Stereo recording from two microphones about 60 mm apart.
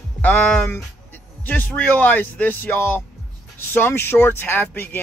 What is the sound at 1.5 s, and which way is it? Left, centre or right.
Speech, left.